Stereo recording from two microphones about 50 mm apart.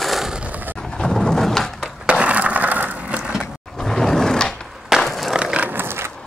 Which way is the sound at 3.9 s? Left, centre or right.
Centre.